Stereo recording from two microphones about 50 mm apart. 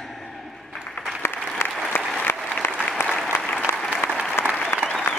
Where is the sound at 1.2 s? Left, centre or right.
Left.